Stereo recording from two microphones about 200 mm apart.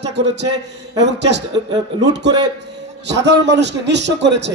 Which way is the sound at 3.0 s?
60° right (ahead or behind).